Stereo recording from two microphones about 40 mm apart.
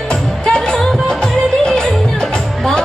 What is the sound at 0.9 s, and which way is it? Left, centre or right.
Music, centre.